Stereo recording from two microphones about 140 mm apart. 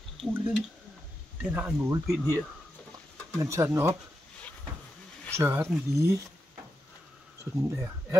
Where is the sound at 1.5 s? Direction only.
15° right (ahead or behind).